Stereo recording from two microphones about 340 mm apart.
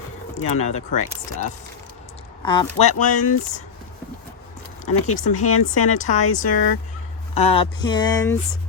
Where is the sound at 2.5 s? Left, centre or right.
Centre.